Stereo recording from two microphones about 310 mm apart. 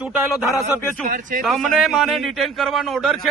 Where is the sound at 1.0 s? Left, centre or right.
Right.